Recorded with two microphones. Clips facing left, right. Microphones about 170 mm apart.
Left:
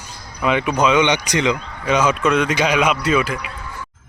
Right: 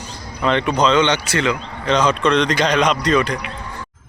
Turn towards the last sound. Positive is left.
turn(degrees=5)  # may be behind; listen again after turning